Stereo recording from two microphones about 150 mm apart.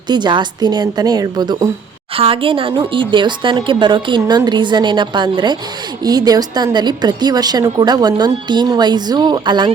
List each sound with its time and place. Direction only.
0.1 s a woman's voice: 30° right (ahead or behind)
2.1 s a woman's voice: 40° right (ahead or behind)